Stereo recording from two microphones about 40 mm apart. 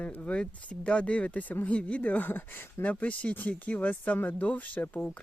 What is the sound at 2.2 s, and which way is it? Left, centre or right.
Speech, left.